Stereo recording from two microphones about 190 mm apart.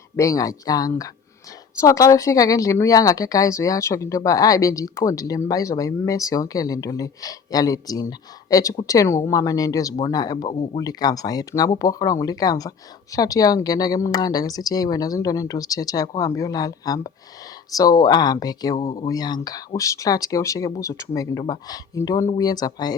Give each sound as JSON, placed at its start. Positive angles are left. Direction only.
{"t": 0.2, "sound": "speech", "side_deg": 15}